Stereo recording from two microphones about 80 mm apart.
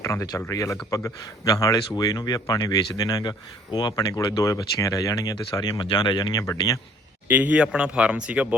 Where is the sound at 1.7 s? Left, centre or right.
Left.